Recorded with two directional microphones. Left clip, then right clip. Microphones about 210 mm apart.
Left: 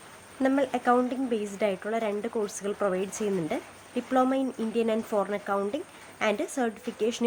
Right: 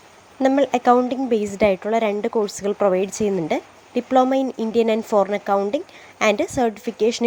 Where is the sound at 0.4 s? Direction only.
25° right (ahead or behind).